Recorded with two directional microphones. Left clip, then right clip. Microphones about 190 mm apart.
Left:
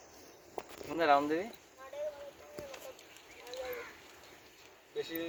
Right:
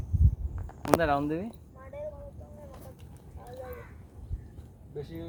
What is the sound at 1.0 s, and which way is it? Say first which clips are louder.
Speech: even; 35° right (ahead or behind).